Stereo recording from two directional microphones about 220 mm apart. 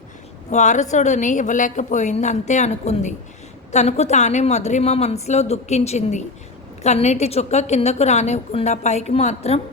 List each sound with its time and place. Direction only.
0.5 s a woman's voice: 35° left (ahead or behind)